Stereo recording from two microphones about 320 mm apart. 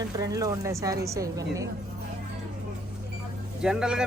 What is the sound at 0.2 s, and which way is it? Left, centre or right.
A woman's voice, centre.